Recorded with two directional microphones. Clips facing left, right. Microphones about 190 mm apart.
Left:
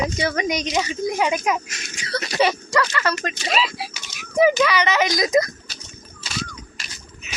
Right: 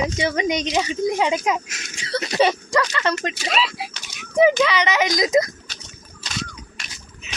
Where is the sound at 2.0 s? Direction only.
25° right (ahead or behind).